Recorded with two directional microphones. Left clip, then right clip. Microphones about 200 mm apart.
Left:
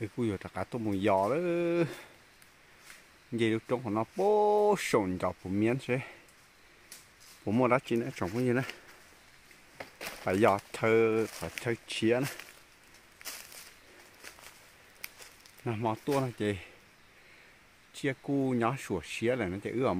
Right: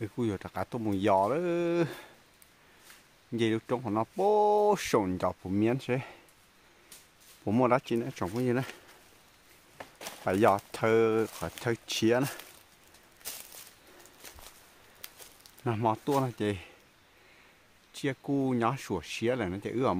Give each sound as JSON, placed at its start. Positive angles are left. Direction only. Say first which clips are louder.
{"t": 0.0, "sound": "speech", "louder": "right 1 dB", "side_deg": -5}
{"t": 3.3, "sound": "speech", "louder": "even", "side_deg": -5}
{"t": 7.4, "sound": "speech", "louder": "right 1 dB", "side_deg": -10}
{"t": 9.8, "sound": "a sound", "louder": "left 2 dB", "side_deg": 30}
{"t": 10.2, "sound": "speech", "louder": "right 1 dB", "side_deg": -5}
{"t": 15.0, "sound": "a sound", "louder": "left 4 dB", "side_deg": 15}
{"t": 15.6, "sound": "speech", "louder": "right 4 dB", "side_deg": -15}
{"t": 17.9, "sound": "speech", "louder": "even", "side_deg": 0}